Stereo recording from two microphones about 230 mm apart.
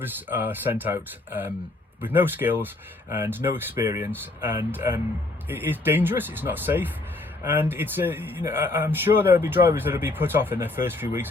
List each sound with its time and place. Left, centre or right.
0.0 s speech: centre